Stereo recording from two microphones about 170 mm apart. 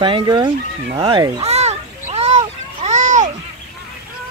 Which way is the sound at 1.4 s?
40° right (ahead or behind).